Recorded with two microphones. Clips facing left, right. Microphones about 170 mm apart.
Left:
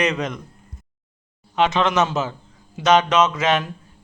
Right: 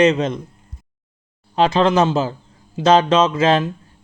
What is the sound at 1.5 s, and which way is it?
A man's voice, 35° right (ahead or behind).